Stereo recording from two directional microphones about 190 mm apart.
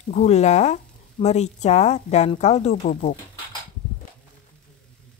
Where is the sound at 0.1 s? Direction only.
35° left (ahead or behind).